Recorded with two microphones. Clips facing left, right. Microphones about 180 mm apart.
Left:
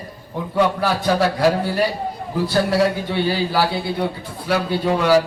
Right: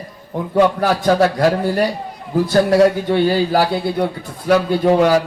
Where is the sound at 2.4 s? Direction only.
45° right (ahead or behind).